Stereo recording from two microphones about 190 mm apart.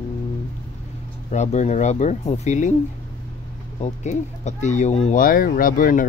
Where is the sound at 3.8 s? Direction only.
35° left (ahead or behind).